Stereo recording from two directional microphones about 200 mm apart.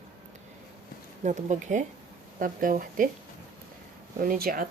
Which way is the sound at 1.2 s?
35° right (ahead or behind).